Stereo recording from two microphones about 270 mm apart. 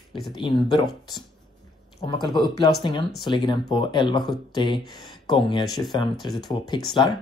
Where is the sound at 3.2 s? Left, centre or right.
Centre.